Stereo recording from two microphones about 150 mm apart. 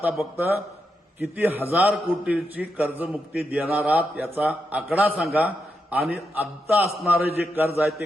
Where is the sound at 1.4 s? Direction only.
10° right (ahead or behind).